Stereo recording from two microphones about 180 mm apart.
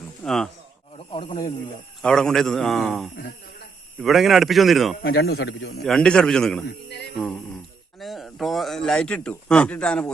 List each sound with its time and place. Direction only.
0.3 s a man's voice: centre (ahead or behind)
0.9 s speech: 30° left (ahead or behind)
2.0 s a man's voice: 5° left (ahead or behind)
5.0 s a man's voice: 60° left (ahead or behind)
5.8 s a man's voice: 5° left (ahead or behind)
6.7 s speech: 70° left (ahead or behind)
7.9 s a man's voice: centre (ahead or behind)